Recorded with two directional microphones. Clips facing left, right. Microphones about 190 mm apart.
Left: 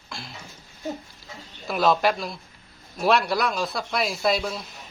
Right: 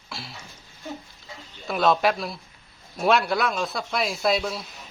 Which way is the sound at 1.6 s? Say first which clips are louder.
Even; centre (ahead or behind).